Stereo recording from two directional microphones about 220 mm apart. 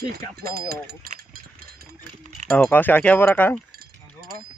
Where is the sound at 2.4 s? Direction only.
5° left (ahead or behind).